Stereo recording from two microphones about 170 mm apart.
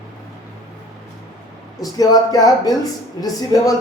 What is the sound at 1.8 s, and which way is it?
Speech, 20° left (ahead or behind).